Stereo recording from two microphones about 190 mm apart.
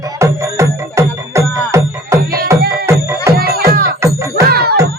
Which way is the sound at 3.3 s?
55° right (ahead or behind).